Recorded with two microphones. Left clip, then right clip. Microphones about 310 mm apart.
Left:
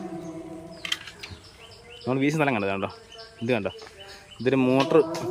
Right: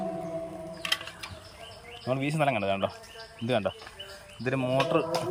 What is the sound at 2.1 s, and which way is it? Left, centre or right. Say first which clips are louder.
Speech: left 3 dB; centre.